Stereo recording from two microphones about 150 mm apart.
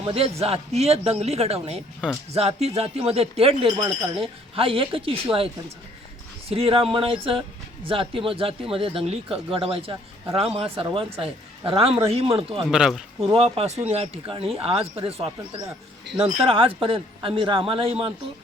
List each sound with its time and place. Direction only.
0.0 s speech: 40° right (ahead or behind)
6.5 s speech: 40° right (ahead or behind)
12.7 s speech: 5° right (ahead or behind)
13.2 s speech: 40° right (ahead or behind)